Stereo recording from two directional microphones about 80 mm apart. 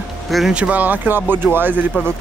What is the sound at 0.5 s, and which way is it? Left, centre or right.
Speech, centre.